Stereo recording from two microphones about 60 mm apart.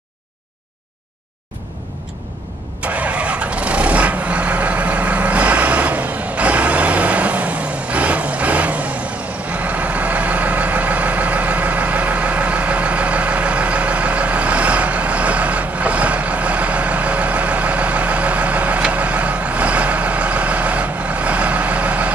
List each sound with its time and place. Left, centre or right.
2.8 s vehicle: right